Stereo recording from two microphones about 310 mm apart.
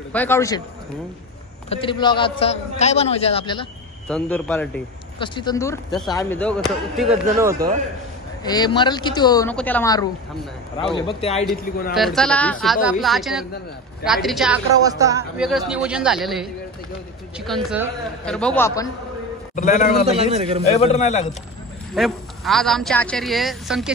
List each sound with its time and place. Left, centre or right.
0.1 s a woman's voice: centre
1.7 s a man's voice: centre
4.1 s speech: centre
8.5 s a woman's voice: centre
11.9 s speech: centre
17.5 s speech: centre
19.5 s a man's voice: left
20.2 s a man's voice: centre
20.7 s a man's voice: left
21.9 s speech: centre